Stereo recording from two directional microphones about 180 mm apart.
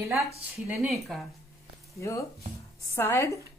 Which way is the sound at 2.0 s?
15° left (ahead or behind).